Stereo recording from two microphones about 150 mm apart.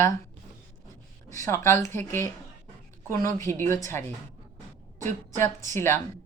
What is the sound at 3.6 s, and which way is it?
Speech, 20° left (ahead or behind).